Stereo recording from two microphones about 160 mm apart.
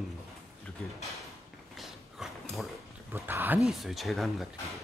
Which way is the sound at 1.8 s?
Centre (ahead or behind).